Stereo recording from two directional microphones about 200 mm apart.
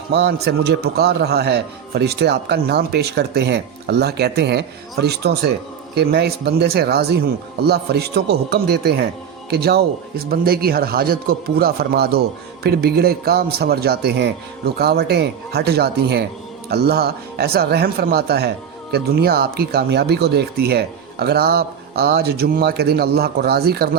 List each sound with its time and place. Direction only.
0.1 s a man's voice: 55° right (ahead or behind)